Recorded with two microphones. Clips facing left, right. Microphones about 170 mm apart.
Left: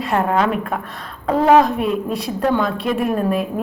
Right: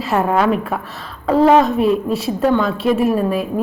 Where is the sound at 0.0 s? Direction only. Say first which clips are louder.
Right 2 dB; 5° right (ahead or behind).